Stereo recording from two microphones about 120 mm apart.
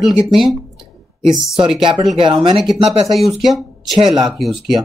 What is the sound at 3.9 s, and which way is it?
Speech, 35° right (ahead or behind).